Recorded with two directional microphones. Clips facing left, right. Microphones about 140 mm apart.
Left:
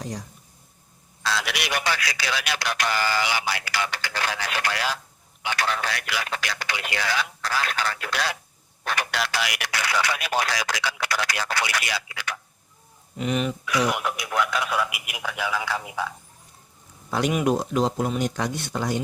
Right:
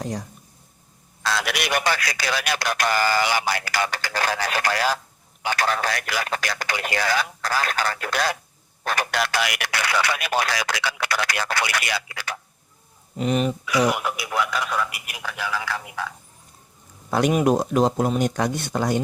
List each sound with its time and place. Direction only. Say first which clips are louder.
0.0 s a man's voice: right 4 dB; 55° right (ahead or behind)
12.1 s speech: right 1 dB; 35° right (ahead or behind)
13.7 s speech: right 2 dB; centre (ahead or behind); by 16.0 s 20° left (ahead or behind)
17.1 s a man's voice: right 3 dB; 50° right (ahead or behind)